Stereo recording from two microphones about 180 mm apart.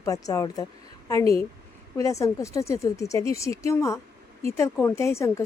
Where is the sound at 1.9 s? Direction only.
15° left (ahead or behind).